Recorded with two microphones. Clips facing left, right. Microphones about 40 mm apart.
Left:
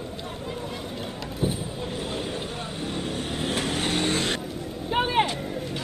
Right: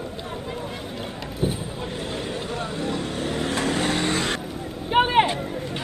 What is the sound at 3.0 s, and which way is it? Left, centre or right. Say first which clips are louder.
Vehicle: right 3 dB; right.